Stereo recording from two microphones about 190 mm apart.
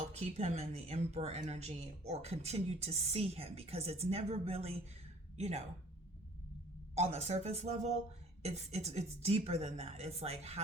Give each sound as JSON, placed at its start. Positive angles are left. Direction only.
{"t": 0.1, "sound": "speech", "side_deg": -35}
{"t": 6.9, "sound": "speech", "side_deg": -35}